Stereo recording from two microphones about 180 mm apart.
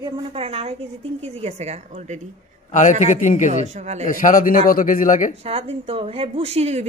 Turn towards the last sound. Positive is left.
turn(degrees=-35)  # may be behind; listen again after turning